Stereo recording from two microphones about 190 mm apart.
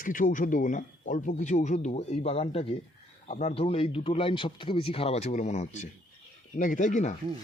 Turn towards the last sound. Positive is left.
turn(degrees=40)  # may be behind; listen again after turning